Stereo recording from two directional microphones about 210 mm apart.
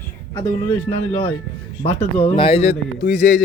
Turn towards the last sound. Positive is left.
turn(degrees=35)  # may be behind; listen again after turning